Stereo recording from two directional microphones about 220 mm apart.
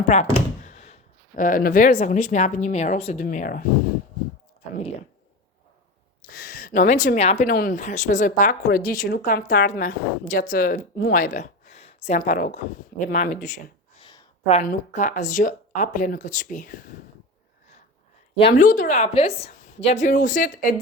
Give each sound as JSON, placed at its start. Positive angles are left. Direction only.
{"t": 0.1, "sound": "speech", "side_deg": 30}
{"t": 0.6, "sound": "a sound", "side_deg": 30}
{"t": 1.4, "sound": "speech", "side_deg": 40}
{"t": 6.3, "sound": "speech", "side_deg": 40}
{"t": 7.5, "sound": "speech", "side_deg": 40}
{"t": 18.3, "sound": "a woman's voice", "side_deg": 25}